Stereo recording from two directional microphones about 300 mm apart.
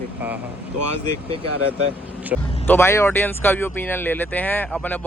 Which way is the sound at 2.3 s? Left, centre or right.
Centre.